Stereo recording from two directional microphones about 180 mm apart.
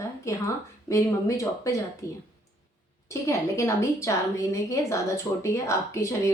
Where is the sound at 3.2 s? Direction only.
15° left (ahead or behind).